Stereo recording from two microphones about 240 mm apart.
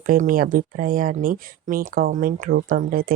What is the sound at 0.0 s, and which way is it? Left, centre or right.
Speech, right.